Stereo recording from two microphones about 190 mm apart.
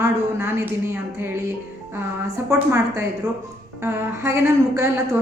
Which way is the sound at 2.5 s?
15° right (ahead or behind).